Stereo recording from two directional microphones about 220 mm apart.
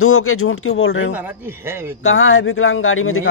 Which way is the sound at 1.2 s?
10° right (ahead or behind).